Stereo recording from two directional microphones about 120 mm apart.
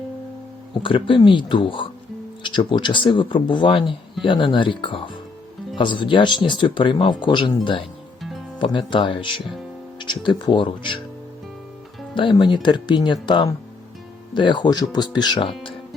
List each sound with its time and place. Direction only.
0.7 s speech: 45° left (ahead or behind)
8.2 s music: centre (ahead or behind)
8.5 s speech: 40° left (ahead or behind)
12.1 s speech: 40° left (ahead or behind)